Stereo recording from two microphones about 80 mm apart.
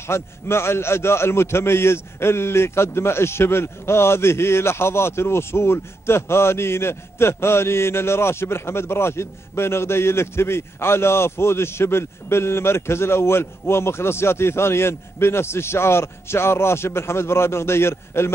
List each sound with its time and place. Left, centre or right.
0.0 s a man's voice: left